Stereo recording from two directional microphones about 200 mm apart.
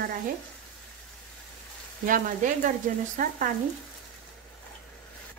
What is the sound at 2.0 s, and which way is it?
Frying, 40° right (ahead or behind).